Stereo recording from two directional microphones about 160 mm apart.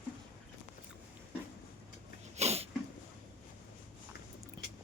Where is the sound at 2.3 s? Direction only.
40° right (ahead or behind).